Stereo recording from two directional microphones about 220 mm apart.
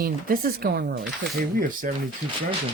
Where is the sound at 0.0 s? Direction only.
40° right (ahead or behind).